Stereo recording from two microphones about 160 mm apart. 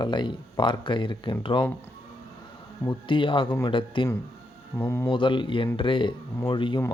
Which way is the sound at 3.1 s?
30° left (ahead or behind).